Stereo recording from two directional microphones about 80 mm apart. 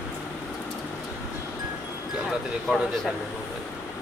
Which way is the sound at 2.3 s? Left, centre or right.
Centre.